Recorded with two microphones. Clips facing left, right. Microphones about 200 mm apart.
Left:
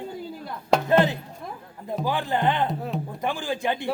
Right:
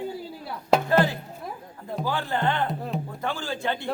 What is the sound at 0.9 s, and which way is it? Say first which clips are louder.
Music: left 4 dB; 20° left (ahead or behind).